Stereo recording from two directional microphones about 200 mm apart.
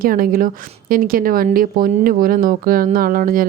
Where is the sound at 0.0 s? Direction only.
45° right (ahead or behind).